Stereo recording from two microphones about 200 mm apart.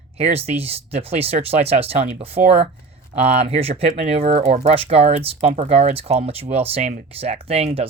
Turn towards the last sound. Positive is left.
turn(degrees=-30)  # may be behind; listen again after turning